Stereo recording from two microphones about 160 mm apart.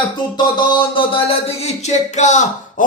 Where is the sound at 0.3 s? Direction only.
30° left (ahead or behind).